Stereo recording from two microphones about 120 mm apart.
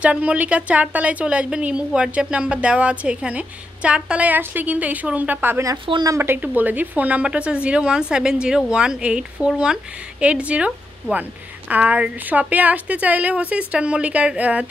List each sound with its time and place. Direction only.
0.0 s a woman's voice: 10° right (ahead or behind)
5.9 s a woman's voice: 40° right (ahead or behind)
6.1 s a woman's voice: 20° right (ahead or behind)